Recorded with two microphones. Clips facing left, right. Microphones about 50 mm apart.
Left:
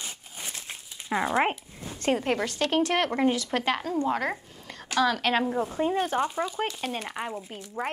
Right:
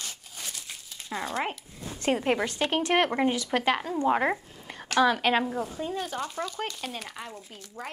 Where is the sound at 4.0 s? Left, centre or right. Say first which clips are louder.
Right 3 dB; right.